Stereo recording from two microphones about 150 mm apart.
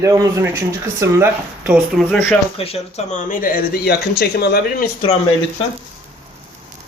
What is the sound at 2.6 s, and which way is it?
Speech, 45° left (ahead or behind).